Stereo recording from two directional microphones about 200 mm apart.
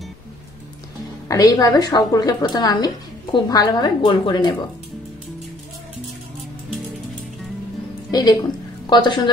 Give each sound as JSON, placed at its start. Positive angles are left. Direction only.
{"t": 1.3, "sound": "a woman's voice", "side_deg": 20}
{"t": 8.1, "sound": "a woman's voice", "side_deg": 20}